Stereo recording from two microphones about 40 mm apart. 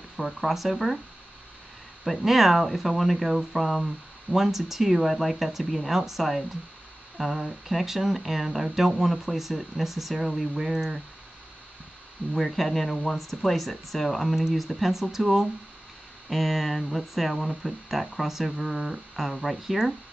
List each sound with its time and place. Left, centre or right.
0.2 s speech: centre
2.0 s speech: centre
12.4 s speech: centre
18.8 s a sound: centre
19.2 s speech: centre